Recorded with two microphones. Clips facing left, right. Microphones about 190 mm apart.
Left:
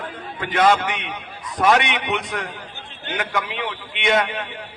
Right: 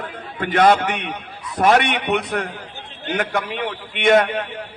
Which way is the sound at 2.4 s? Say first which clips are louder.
Right 3 dB; 40° right (ahead or behind).